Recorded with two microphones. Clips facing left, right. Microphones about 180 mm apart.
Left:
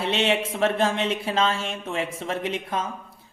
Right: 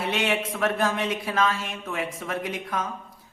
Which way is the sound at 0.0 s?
25° left (ahead or behind).